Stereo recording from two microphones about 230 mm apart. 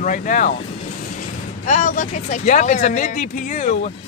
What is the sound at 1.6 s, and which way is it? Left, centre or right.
Speech, left.